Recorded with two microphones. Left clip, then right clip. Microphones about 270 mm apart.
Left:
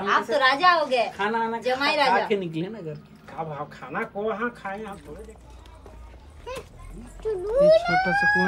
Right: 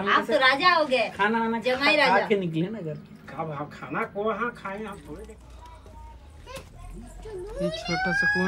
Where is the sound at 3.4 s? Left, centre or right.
Left.